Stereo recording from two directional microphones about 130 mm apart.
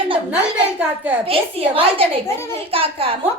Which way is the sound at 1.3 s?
45° right (ahead or behind).